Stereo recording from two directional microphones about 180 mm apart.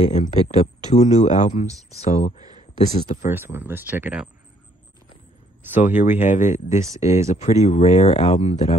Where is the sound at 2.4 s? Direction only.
20° right (ahead or behind).